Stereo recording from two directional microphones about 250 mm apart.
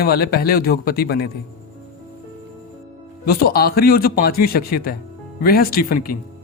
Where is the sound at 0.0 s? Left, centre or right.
Left.